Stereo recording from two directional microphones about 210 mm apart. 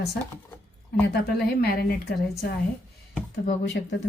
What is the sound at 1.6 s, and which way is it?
Speech, 45° left (ahead or behind).